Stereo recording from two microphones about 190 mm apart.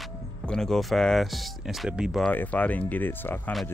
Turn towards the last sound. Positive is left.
turn(degrees=10)  # may be behind; listen again after turning